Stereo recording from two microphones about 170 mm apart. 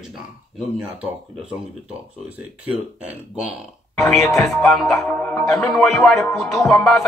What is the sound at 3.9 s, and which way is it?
Speech, centre (ahead or behind).